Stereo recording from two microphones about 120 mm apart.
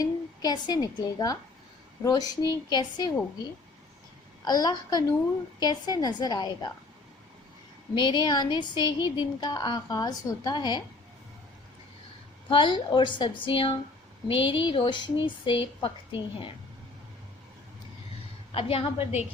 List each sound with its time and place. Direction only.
0.0 s a woman's voice: 35° left (ahead or behind)
4.4 s speech: 35° left (ahead or behind)
7.9 s speech: 40° left (ahead or behind)
12.5 s speech: 45° left (ahead or behind)
18.5 s speech: 50° left (ahead or behind)